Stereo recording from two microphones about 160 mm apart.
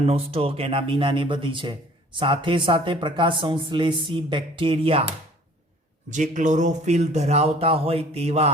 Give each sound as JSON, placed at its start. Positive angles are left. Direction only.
{"t": 0.0, "sound": "a man's voice", "side_deg": -40}
{"t": 6.1, "sound": "speech", "side_deg": -50}